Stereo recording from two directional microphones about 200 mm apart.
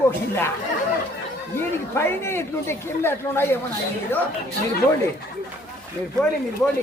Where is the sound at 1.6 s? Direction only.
10° left (ahead or behind).